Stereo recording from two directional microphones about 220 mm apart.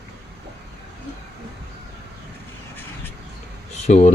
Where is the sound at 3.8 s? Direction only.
30° left (ahead or behind).